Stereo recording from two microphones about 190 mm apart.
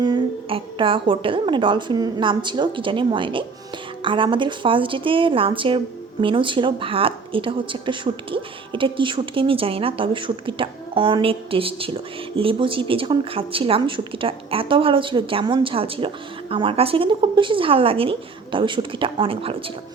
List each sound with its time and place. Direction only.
0.0 s a woman's voice: 25° right (ahead or behind)